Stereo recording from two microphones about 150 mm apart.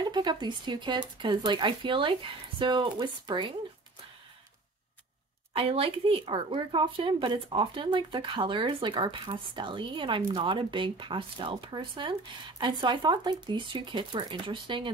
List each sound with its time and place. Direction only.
0.0 s speech: 30° right (ahead or behind)
5.5 s speech: 40° right (ahead or behind)